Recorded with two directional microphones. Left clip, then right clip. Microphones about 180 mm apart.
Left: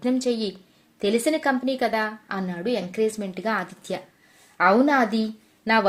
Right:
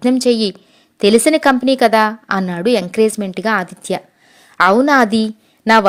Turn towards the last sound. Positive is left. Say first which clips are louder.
# right 10 dB
turn(degrees=-40)  # may be behind; listen again after turning